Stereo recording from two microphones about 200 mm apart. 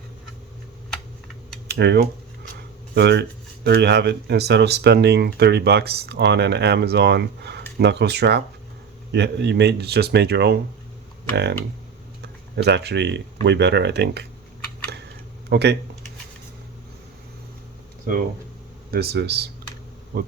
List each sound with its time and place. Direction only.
1.6 s speech: 55° right (ahead or behind)
12.2 s speech: 55° right (ahead or behind)
15.4 s speech: 55° right (ahead or behind)
18.9 s speech: 55° right (ahead or behind)